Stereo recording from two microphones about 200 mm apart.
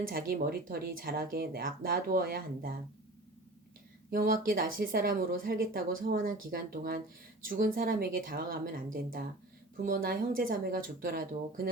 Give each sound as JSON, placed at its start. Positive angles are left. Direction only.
{"t": 0.1, "sound": "speech", "side_deg": -50}
{"t": 4.1, "sound": "speech", "side_deg": -45}